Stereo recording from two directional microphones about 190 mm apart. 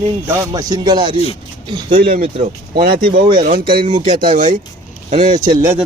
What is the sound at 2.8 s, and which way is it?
Speech, 50° right (ahead or behind).